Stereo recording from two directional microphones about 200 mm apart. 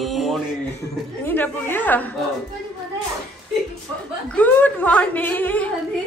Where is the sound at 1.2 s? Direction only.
10° left (ahead or behind).